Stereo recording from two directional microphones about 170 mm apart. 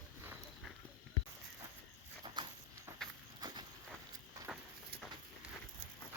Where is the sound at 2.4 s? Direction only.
25° right (ahead or behind).